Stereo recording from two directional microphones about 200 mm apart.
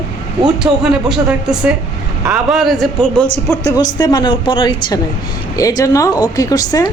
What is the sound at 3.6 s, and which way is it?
A woman's voice, 20° left (ahead or behind).